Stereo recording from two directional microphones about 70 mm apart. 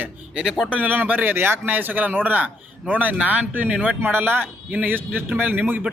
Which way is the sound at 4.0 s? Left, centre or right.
Right.